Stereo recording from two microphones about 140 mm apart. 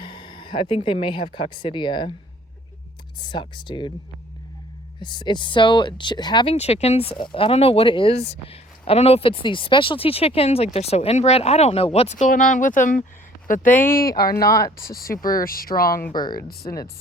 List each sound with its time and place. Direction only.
0.0 s speech: 35° left (ahead or behind)
3.2 s speech: 35° left (ahead or behind)
4.9 s speech: 35° left (ahead or behind)
12.1 s speech: 70° left (ahead or behind)
13.7 s speech: 15° left (ahead or behind)
14.2 s speech: 90° left
14.4 s speech: 25° left (ahead or behind)
14.8 s speech: 90° left
16.6 s speech: 25° left (ahead or behind)